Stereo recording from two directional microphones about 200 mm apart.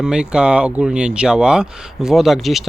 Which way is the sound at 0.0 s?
5° right (ahead or behind).